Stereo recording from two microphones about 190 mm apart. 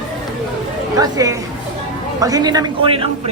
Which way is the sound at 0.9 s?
20° right (ahead or behind).